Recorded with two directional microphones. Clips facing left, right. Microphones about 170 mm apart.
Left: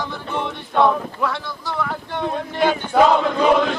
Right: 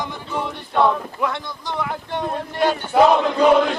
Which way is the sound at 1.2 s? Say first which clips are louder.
Right 1 dB; 20° right (ahead or behind).